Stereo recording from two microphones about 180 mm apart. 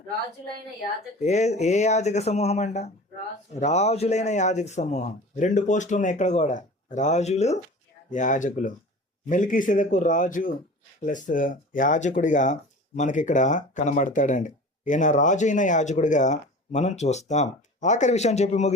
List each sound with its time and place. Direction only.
1.2 s speech: 40° left (ahead or behind)